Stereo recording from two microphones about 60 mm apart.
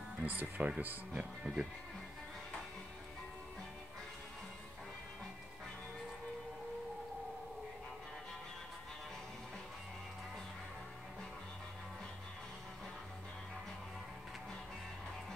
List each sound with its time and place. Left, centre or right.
0.2 s speech: right
1.4 s speech: centre